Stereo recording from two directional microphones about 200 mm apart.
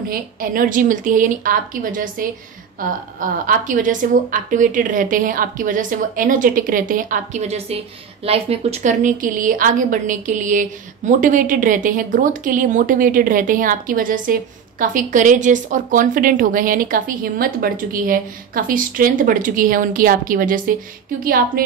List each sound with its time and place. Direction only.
0.1 s a woman's voice: 45° right (ahead or behind)